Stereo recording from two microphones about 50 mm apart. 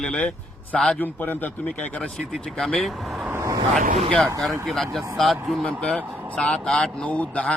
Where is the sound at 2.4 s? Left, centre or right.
Centre.